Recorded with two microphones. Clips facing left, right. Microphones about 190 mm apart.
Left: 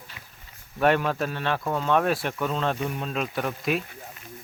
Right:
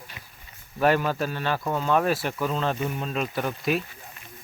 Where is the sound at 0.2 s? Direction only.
25° right (ahead or behind).